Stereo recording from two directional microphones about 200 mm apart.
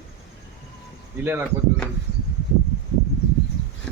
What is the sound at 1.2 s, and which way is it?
Speech, 10° right (ahead or behind).